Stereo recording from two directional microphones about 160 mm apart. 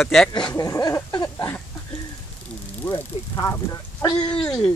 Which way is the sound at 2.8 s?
15° left (ahead or behind).